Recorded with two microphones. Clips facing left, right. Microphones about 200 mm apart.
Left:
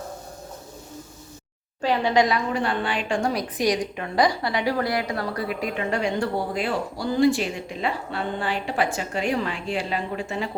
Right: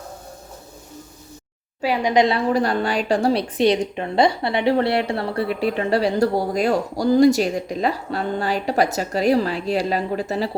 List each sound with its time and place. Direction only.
1.8 s a woman's voice: 10° right (ahead or behind)
2.1 s a woman's voice: 30° right (ahead or behind)